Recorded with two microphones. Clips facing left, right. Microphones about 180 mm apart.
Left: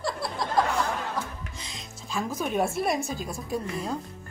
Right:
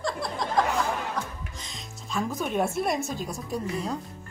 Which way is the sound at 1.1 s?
Centre (ahead or behind).